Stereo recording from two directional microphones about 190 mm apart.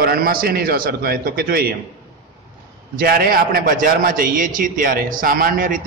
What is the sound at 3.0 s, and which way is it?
A man's voice, 50° right (ahead or behind).